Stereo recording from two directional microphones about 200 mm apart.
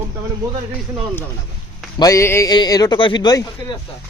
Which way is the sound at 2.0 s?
15° left (ahead or behind).